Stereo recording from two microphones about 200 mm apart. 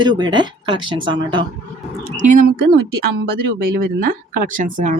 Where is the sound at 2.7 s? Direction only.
55° right (ahead or behind).